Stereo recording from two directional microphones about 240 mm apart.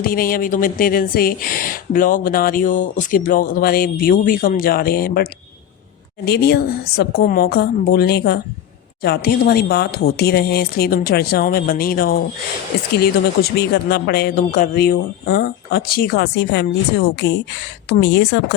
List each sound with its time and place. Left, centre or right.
0.0 s a woman's voice: left